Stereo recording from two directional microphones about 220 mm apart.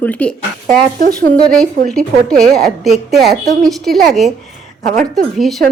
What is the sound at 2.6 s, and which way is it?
A woman's voice, centre (ahead or behind).